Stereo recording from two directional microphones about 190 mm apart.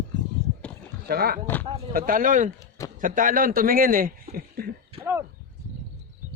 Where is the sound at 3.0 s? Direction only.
45° right (ahead or behind).